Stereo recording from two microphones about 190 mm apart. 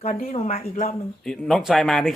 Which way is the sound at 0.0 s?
40° left (ahead or behind).